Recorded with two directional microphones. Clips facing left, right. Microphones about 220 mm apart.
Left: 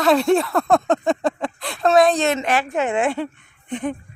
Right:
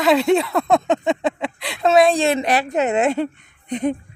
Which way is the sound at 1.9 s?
30° right (ahead or behind).